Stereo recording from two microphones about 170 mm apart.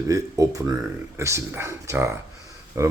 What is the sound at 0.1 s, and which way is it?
A man's voice, 20° right (ahead or behind).